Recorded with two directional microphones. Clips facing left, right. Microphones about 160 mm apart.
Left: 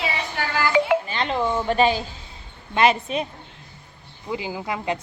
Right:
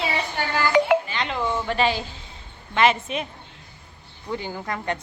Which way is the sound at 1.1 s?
35° left (ahead or behind).